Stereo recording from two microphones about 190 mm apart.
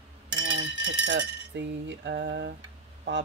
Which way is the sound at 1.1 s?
75° right (ahead or behind).